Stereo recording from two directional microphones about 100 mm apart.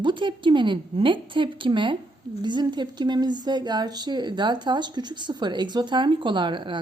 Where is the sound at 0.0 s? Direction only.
50° right (ahead or behind).